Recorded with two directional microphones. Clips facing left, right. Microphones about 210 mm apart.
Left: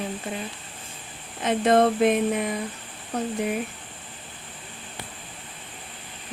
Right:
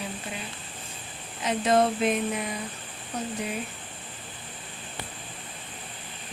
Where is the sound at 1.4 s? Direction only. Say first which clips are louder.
Left 4 dB; 55° left (ahead or behind).